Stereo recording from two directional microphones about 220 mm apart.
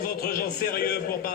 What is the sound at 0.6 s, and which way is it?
Speech, 45° left (ahead or behind).